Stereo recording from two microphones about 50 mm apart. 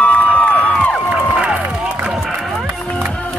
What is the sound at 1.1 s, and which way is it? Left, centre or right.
Crowd, right.